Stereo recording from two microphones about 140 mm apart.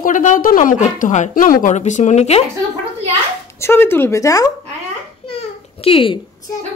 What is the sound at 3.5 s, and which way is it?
Speech, 15° left (ahead or behind).